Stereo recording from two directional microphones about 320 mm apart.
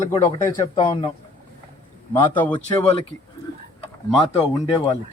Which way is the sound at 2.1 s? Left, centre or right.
Centre.